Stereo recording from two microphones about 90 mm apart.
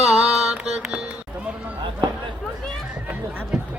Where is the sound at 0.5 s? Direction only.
10° right (ahead or behind).